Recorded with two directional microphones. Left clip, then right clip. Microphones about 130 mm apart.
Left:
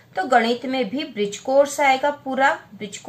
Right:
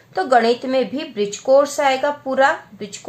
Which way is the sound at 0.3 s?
55° right (ahead or behind).